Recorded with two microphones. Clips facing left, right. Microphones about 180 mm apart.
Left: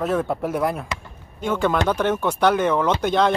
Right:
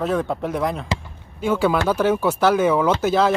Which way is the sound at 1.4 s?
5° right (ahead or behind).